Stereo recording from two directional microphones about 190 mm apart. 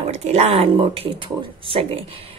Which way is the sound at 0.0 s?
35° right (ahead or behind).